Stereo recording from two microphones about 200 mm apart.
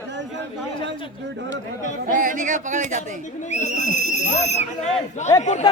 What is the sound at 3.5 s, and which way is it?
Speech, 35° left (ahead or behind).